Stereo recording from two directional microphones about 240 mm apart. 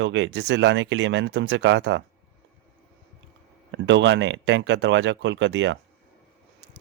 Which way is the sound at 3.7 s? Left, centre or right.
Right.